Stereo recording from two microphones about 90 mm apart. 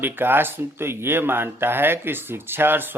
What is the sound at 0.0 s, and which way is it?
Speech, 25° right (ahead or behind).